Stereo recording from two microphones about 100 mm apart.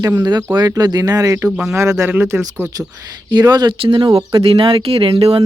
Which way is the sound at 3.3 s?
45° right (ahead or behind).